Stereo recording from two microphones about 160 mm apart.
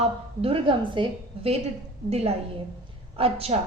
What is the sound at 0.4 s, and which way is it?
Speech, 35° right (ahead or behind).